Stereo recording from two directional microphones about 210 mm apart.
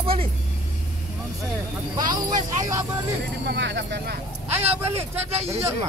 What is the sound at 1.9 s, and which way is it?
Speech, 20° right (ahead or behind).